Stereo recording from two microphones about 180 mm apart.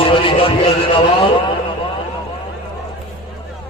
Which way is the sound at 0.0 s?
30° left (ahead or behind).